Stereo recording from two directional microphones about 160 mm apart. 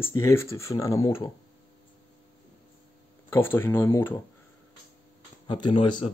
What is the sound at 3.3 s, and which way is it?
Speech, 15° left (ahead or behind).